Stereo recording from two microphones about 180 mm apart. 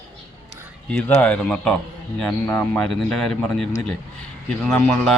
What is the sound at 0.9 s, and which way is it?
Speech, 5° left (ahead or behind).